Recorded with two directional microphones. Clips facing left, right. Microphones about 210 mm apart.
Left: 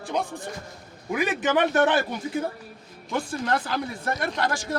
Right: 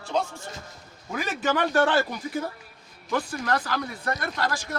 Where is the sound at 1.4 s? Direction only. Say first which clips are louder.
Even; 20° left (ahead or behind).